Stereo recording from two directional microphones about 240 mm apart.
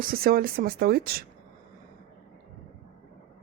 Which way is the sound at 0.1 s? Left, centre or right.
Right.